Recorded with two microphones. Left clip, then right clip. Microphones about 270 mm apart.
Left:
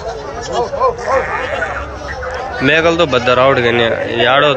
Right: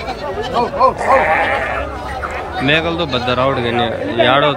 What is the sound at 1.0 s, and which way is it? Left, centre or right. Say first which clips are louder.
Speech: right 3 dB; right.